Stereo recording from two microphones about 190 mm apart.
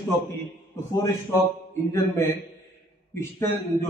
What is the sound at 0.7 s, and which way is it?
A man's voice, 15° left (ahead or behind).